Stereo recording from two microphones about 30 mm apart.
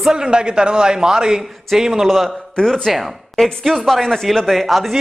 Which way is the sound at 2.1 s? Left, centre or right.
Centre.